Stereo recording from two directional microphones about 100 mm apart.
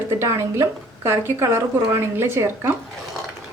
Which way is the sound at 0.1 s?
30° right (ahead or behind).